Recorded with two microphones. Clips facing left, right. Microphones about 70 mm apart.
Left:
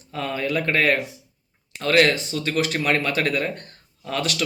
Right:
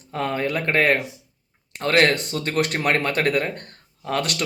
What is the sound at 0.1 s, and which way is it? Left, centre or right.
Speech, right.